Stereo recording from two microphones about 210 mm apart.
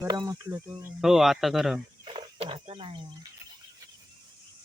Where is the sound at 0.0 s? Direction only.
15° right (ahead or behind).